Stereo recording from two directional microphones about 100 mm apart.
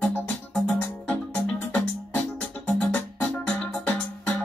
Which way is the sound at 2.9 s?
10° left (ahead or behind).